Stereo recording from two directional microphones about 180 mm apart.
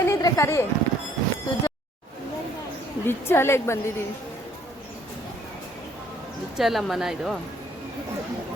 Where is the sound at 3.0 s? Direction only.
15° left (ahead or behind).